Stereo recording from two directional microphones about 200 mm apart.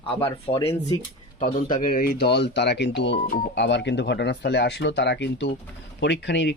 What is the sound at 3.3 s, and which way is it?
Speech, 45° left (ahead or behind).